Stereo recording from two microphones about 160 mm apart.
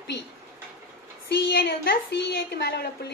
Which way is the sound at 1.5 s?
90° left.